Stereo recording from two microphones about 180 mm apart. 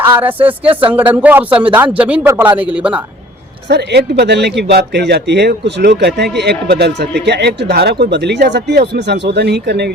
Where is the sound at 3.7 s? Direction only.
65° right (ahead or behind).